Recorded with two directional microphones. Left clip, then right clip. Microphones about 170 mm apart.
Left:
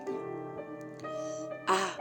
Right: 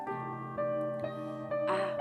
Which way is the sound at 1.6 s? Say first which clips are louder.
Left 3 dB; 30° left (ahead or behind).